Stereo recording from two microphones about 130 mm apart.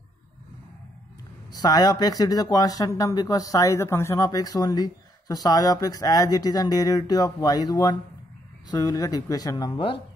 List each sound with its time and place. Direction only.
1.5 s speech: 30° left (ahead or behind)